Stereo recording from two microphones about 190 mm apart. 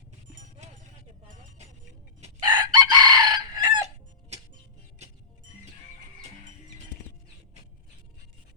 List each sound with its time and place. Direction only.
0.6 s clip-clop: 35° right (ahead or behind)
2.4 s chicken: 20° right (ahead or behind)
4.3 s music: 35° right (ahead or behind)